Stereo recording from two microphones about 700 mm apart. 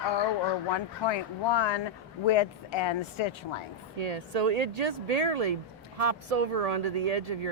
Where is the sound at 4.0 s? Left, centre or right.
Right.